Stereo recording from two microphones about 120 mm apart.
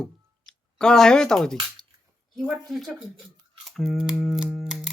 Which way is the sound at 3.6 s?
5° left (ahead or behind).